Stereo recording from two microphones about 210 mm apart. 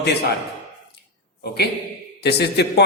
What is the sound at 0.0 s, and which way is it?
Speech, 50° left (ahead or behind).